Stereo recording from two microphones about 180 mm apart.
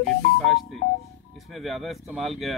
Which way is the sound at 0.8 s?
75° left (ahead or behind).